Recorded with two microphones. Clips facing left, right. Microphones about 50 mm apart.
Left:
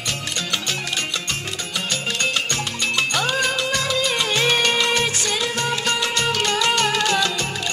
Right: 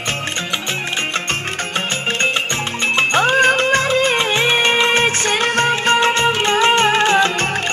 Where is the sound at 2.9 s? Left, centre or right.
Right.